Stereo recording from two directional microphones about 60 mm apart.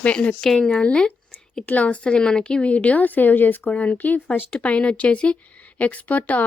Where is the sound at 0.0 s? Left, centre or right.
Left.